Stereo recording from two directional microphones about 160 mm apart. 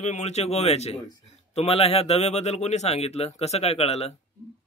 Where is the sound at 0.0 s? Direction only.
45° left (ahead or behind).